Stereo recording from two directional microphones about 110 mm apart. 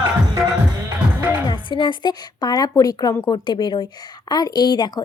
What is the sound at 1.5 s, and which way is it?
A woman's voice, 45° left (ahead or behind).